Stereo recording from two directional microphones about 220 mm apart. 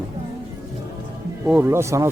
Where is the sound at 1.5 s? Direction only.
10° right (ahead or behind).